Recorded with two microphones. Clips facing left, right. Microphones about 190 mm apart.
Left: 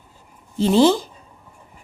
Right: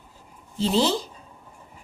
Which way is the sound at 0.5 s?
55° left (ahead or behind).